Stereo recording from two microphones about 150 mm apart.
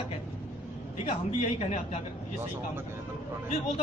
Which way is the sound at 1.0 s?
50° left (ahead or behind).